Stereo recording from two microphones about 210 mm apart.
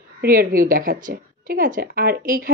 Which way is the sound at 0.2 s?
45° right (ahead or behind).